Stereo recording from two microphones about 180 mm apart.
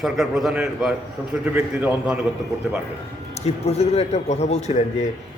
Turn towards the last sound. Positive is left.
turn(degrees=40)  # may be behind; listen again after turning